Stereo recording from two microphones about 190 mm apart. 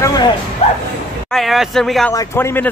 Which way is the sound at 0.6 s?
35° left (ahead or behind).